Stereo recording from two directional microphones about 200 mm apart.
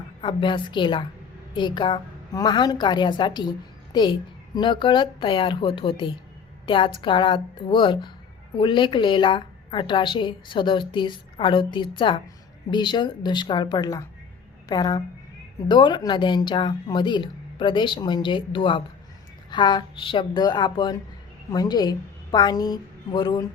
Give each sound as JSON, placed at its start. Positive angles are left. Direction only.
{"t": 0.2, "sound": "a woman's voice", "side_deg": 25}